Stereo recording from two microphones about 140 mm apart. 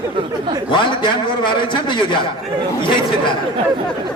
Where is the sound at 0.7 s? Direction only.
35° left (ahead or behind).